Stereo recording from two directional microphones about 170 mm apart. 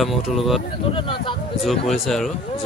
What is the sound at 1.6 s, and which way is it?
Speech, centre (ahead or behind).